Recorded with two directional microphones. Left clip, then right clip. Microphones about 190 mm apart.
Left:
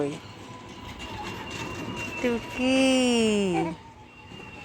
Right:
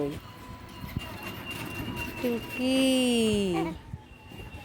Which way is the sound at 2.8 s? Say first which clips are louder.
Left 2 dB; 25° right (ahead or behind).